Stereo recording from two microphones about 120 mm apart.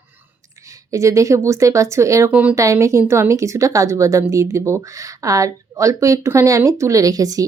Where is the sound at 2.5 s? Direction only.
25° right (ahead or behind).